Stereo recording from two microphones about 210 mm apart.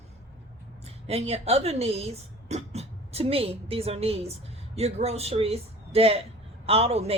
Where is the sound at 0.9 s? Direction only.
30° right (ahead or behind).